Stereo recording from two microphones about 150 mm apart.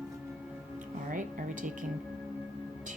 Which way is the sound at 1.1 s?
60° right (ahead or behind).